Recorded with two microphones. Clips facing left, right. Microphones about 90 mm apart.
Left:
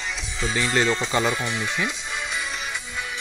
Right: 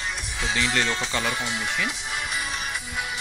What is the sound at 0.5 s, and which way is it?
Speech, 20° left (ahead or behind).